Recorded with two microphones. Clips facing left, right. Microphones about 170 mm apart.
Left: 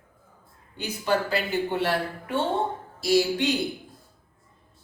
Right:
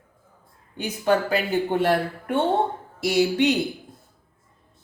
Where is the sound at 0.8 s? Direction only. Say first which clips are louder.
Right 4 dB; 50° right (ahead or behind).